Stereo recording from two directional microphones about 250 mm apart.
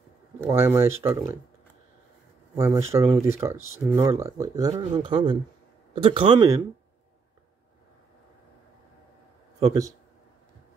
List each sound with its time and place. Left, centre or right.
0.4 s speech: centre
2.5 s speech: centre